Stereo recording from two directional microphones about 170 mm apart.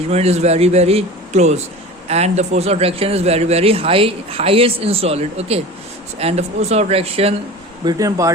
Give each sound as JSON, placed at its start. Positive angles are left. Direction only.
{"t": 0.1, "sound": "a man's voice", "side_deg": -40}
{"t": 7.9, "sound": "speech", "side_deg": -20}